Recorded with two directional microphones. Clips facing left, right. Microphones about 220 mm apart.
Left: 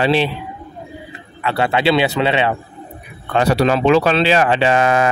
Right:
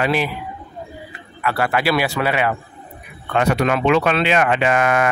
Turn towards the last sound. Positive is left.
turn(degrees=30)  # may be behind; listen again after turning